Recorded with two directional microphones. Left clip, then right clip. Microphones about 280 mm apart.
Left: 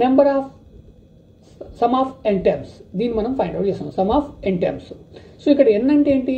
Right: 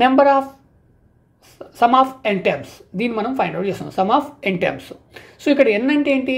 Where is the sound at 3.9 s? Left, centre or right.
Right.